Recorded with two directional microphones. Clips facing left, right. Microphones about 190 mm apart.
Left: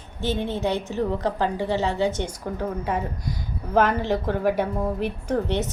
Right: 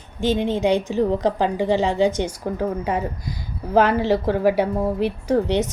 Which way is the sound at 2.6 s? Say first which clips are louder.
Right 3 dB; 5° right (ahead or behind).